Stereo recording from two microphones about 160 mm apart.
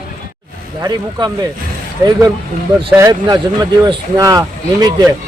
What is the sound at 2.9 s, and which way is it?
Speech, 20° right (ahead or behind).